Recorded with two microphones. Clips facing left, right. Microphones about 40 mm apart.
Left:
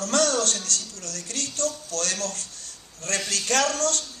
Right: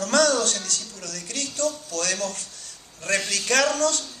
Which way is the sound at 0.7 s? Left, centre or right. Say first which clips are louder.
Even; left.